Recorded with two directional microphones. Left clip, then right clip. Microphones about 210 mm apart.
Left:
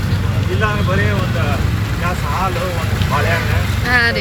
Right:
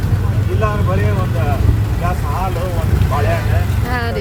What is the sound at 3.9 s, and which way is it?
Speech, 15° right (ahead or behind).